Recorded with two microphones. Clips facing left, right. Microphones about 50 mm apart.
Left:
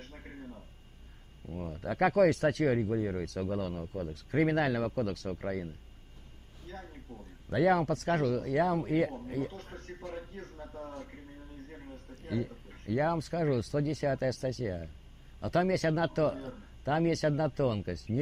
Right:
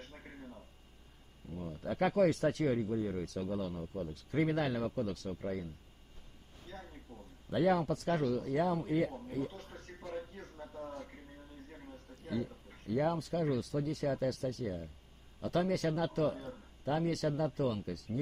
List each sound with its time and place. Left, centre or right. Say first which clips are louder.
0.2 s a sound: left 4 dB; centre
1.5 s speech: left 3 dB; left
6.7 s a sound: left 3 dB; left
7.1 s speech: left 6 dB; left
7.4 s speech: left 4 dB; left
11.1 s speech: left 3 dB; centre
12.2 s speech: left 3 dB; left
15.4 s speech: left 4 dB; left